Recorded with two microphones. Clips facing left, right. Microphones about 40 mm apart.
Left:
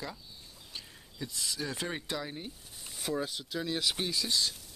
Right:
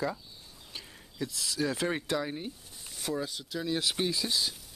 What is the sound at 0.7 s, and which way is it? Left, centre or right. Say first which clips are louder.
Speech: right 5 dB; centre.